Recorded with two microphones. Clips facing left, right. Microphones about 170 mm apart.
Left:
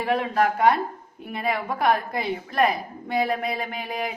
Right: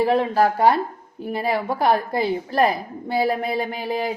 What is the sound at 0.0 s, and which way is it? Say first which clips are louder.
A woman's voice: right 4 dB; 30° right (ahead or behind).